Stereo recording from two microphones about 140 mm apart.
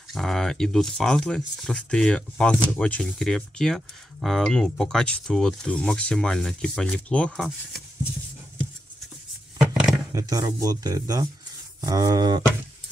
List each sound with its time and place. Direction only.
0.1 s speech: 5° left (ahead or behind)
9.6 s a sound: 5° right (ahead or behind)
10.1 s speech: 25° right (ahead or behind)